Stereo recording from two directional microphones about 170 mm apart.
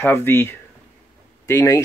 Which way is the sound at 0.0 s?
15° left (ahead or behind).